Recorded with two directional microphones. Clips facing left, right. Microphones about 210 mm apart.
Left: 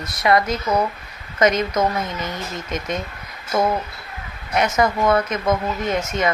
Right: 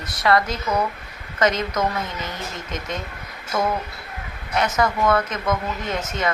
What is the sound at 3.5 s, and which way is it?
Speech, 15° left (ahead or behind).